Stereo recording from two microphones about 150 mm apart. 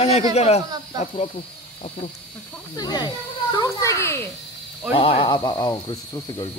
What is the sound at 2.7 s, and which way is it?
Speech, 25° left (ahead or behind).